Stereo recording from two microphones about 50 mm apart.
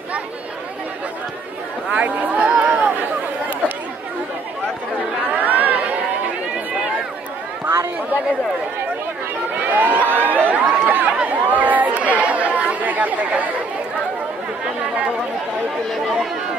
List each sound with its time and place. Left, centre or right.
1.9 s a sound: right
5.3 s chatter: right
9.6 s crowd: right
11.2 s chatter: right